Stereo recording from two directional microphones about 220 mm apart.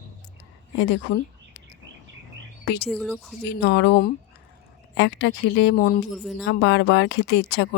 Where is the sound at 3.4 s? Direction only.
50° left (ahead or behind).